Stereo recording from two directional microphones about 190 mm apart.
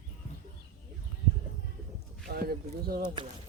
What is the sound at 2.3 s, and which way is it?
Speech, 55° right (ahead or behind).